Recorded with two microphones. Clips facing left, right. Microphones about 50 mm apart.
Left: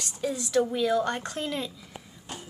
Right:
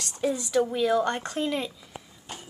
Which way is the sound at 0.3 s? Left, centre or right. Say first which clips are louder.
Even; centre.